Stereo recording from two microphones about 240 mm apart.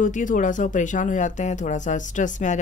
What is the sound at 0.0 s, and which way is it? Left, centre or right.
Speech, left.